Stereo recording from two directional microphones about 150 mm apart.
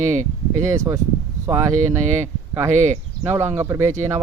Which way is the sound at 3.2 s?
15° right (ahead or behind).